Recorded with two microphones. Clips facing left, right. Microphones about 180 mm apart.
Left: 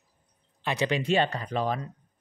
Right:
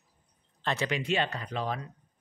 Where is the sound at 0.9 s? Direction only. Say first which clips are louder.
Left 5 dB; 35° left (ahead or behind).